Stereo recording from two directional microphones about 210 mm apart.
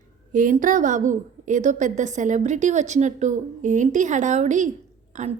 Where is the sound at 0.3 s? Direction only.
40° right (ahead or behind).